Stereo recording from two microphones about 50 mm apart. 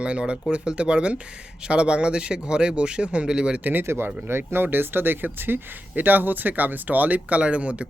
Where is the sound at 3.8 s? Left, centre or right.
Right.